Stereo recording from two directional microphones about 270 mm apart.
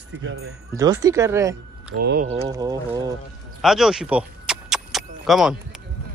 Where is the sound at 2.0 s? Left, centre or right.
Right.